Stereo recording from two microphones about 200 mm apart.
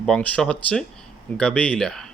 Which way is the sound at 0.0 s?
5° left (ahead or behind).